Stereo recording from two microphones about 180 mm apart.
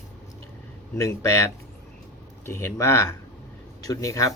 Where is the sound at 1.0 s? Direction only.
15° left (ahead or behind).